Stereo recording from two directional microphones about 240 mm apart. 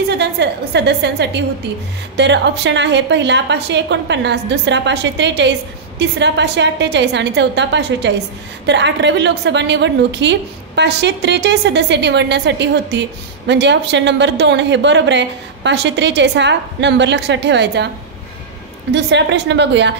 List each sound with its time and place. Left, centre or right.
0.1 s a woman's voice: right
18.9 s a woman's voice: right